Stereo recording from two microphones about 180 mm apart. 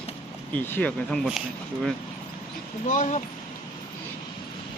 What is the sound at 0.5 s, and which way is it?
Speech, 10° left (ahead or behind).